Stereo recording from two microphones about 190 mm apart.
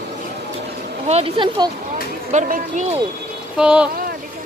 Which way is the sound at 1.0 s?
30° right (ahead or behind).